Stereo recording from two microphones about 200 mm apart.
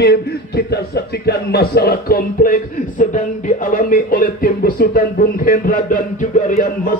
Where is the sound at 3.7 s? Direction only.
40° left (ahead or behind).